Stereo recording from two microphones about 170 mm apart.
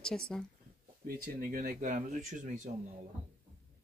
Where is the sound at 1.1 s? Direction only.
60° right (ahead or behind).